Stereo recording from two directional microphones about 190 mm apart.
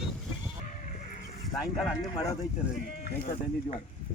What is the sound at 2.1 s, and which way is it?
Speech, 15° left (ahead or behind).